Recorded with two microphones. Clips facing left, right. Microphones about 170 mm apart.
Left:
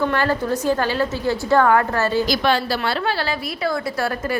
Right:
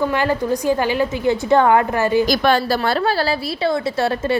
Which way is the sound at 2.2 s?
50° right (ahead or behind).